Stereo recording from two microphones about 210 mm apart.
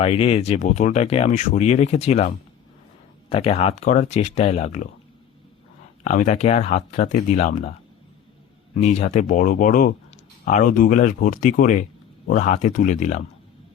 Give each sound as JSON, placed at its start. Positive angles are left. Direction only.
{"t": 0.0, "sound": "speech", "side_deg": 30}
{"t": 6.1, "sound": "speech", "side_deg": 35}
{"t": 8.8, "sound": "speech", "side_deg": 30}